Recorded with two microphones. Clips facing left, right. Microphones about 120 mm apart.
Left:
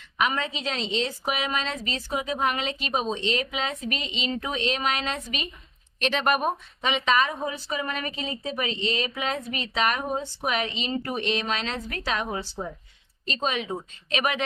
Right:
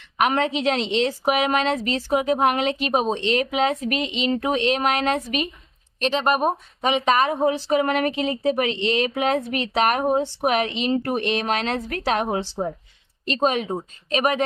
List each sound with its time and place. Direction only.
0.2 s a woman's voice: 65° right (ahead or behind)
5.9 s speech: 30° right (ahead or behind)
6.8 s a woman's voice: 50° right (ahead or behind)
14.1 s speech: 40° right (ahead or behind)